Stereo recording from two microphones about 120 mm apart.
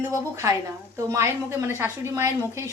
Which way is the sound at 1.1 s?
25° right (ahead or behind).